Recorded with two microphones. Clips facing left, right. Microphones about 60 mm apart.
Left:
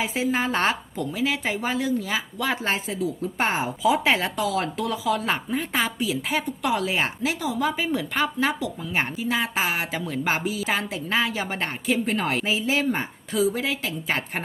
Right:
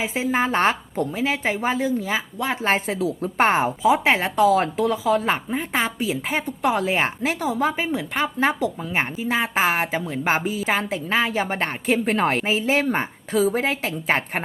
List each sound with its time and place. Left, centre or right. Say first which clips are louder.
0.0 s a woman's voice: right 2 dB; right
2.8 s a woman's voice: right 3 dB; right
3.8 s a woman's voice: right 2 dB; right
4.4 s a woman's voice: right 7 dB; right
7.2 s a woman's voice: right 3 dB; right
7.9 s a woman's voice: right 1 dB; right
8.4 s a woman's voice: right 4 dB; right
9.0 s a woman's voice: right 2 dB; right